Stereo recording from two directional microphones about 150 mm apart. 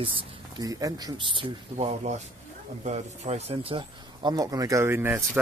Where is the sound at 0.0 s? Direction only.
30° right (ahead or behind).